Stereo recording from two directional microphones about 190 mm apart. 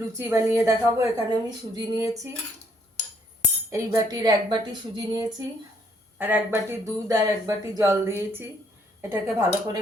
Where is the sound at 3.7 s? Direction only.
20° right (ahead or behind).